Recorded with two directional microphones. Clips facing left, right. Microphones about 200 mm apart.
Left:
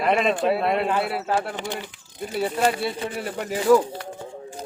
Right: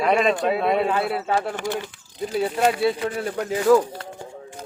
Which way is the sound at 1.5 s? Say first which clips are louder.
Right 4 dB; 15° left (ahead or behind).